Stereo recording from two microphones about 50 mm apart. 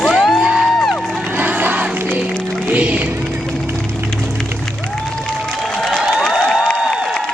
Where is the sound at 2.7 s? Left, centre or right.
Right.